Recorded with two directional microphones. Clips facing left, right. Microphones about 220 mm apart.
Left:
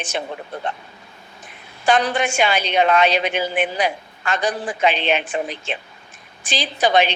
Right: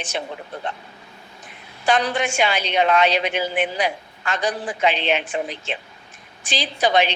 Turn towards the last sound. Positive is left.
turn(degrees=50)  # may be behind; listen again after turning